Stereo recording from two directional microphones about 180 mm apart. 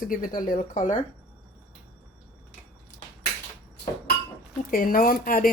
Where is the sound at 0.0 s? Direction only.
50° left (ahead or behind).